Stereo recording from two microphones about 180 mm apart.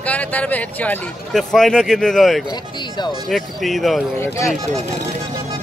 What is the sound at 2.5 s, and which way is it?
Speech, 25° left (ahead or behind).